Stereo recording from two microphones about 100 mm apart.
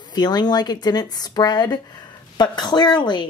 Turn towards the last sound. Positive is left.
turn(degrees=50)  # may be behind; listen again after turning